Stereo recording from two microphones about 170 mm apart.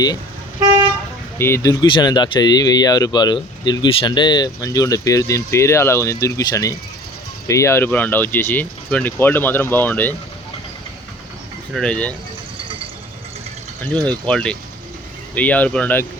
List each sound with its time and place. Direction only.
1.4 s speech: 15° left (ahead or behind)
11.7 s speech: 5° left (ahead or behind)
14.3 s speech: 5° left (ahead or behind)